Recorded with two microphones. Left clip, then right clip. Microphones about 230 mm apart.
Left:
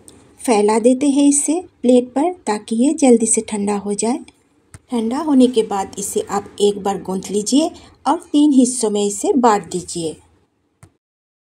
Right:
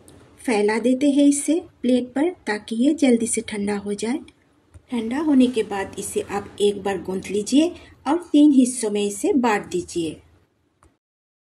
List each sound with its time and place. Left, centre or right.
0.0 s a woman's voice: centre